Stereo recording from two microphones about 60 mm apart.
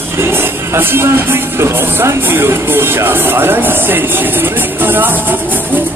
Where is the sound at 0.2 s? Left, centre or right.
Right.